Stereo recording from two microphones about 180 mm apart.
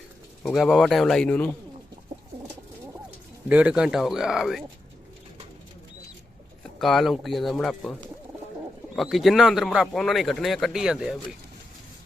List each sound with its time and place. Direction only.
0.4 s speech: centre (ahead or behind)
3.5 s speech: 5° right (ahead or behind)
6.7 s speech: centre (ahead or behind)
9.0 s speech: centre (ahead or behind)